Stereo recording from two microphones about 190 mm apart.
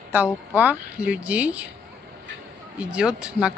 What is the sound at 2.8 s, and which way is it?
Speech, 5° right (ahead or behind).